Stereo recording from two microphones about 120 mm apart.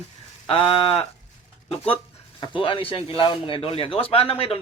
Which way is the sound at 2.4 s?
45° left (ahead or behind).